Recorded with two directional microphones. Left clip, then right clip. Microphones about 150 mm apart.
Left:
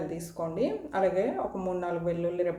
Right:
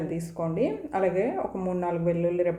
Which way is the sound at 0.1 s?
30° right (ahead or behind).